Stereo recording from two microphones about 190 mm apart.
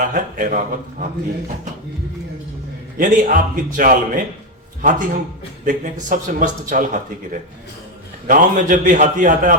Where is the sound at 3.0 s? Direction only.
45° right (ahead or behind).